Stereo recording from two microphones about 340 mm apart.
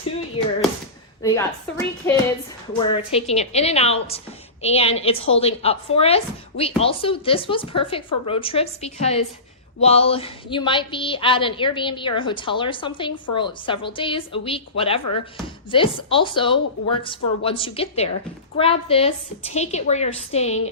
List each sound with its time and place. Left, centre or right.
1.2 s a woman's voice: centre